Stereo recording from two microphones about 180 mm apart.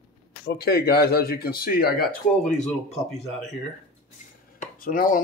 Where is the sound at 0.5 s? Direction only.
60° left (ahead or behind).